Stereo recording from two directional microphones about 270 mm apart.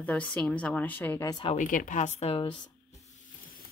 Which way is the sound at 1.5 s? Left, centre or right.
Left.